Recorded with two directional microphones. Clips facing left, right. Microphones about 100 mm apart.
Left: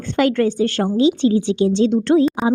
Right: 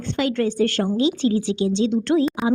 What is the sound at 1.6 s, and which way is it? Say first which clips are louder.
Speech: left 5 dB; 50° left (ahead or behind).